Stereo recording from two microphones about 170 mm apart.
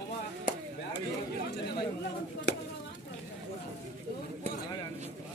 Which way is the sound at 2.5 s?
80° left.